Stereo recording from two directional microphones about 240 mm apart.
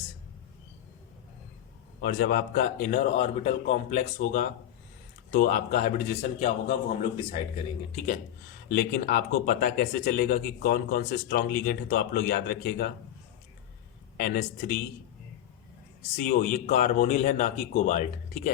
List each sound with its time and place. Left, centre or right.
2.0 s a man's voice: left
8.7 s speech: left
14.2 s speech: left
16.1 s speech: left